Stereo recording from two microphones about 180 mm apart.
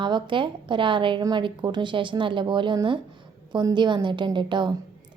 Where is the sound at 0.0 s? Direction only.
25° right (ahead or behind).